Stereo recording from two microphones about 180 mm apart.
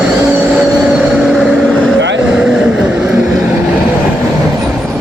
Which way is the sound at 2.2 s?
5° right (ahead or behind).